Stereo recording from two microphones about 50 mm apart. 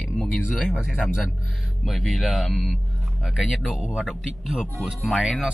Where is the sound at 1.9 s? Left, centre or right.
Centre.